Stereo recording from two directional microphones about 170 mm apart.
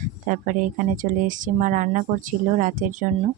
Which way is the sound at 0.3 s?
50° right (ahead or behind).